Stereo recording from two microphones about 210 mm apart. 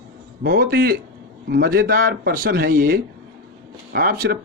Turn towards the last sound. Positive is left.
turn(degrees=-45)  # may be behind; listen again after turning